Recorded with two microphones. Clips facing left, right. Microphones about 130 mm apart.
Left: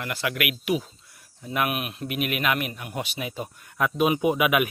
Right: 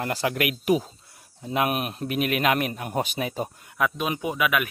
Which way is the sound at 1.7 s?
35° right (ahead or behind).